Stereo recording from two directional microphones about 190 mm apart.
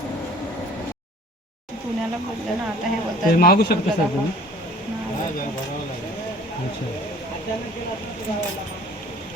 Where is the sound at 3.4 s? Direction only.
55° left (ahead or behind).